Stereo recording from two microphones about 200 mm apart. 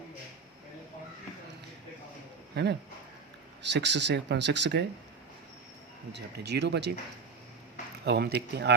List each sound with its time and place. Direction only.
2.5 s speech: 60° right (ahead or behind)
6.1 s speech: 60° right (ahead or behind)
8.0 s speech: 55° right (ahead or behind)